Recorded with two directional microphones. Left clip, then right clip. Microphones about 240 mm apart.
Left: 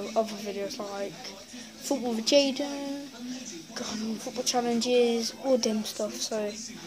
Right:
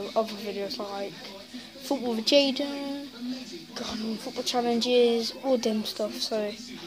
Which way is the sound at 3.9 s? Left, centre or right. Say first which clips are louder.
Right 1 dB; centre.